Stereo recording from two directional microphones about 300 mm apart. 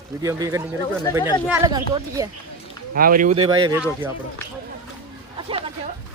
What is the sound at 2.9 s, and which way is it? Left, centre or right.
Speech, right.